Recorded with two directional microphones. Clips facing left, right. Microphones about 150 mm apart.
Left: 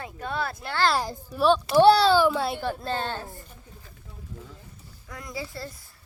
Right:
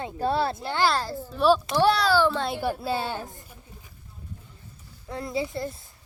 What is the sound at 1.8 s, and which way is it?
Speech, 30° left (ahead or behind).